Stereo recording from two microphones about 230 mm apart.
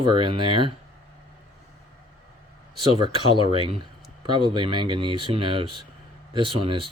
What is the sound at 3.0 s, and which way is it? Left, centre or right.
Speech, right.